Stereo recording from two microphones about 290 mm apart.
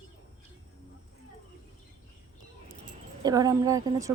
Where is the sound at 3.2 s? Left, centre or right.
Centre.